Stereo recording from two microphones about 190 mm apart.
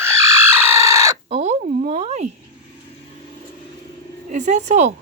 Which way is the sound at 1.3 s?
35° right (ahead or behind).